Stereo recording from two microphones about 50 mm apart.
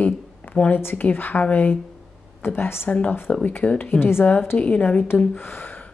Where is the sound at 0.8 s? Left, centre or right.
Left.